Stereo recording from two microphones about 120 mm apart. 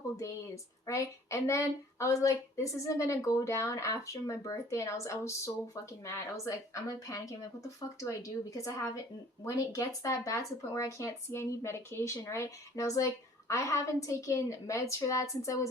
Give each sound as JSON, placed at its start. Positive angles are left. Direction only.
{"t": 0.2, "sound": "speech", "side_deg": 25}